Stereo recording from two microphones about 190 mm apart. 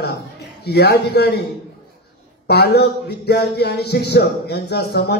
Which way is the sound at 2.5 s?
60° left (ahead or behind).